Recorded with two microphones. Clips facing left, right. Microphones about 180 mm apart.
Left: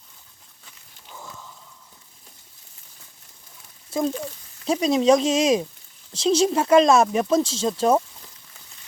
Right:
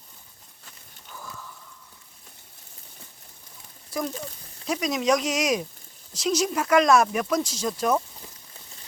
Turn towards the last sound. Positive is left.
turn(degrees=30)  # may be behind; listen again after turning